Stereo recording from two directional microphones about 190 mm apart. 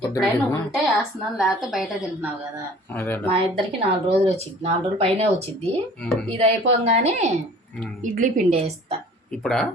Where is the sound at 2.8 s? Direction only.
10° left (ahead or behind).